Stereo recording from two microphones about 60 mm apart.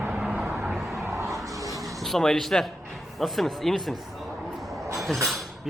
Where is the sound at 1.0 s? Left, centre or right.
Right.